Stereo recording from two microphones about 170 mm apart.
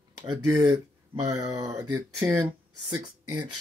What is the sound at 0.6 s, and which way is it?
Speech, 20° right (ahead or behind).